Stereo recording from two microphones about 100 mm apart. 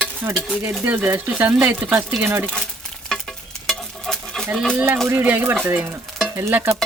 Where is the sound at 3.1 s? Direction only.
5° left (ahead or behind).